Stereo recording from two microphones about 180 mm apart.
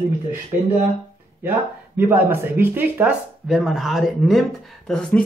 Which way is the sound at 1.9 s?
10° right (ahead or behind).